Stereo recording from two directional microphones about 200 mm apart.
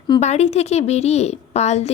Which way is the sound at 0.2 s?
35° left (ahead or behind).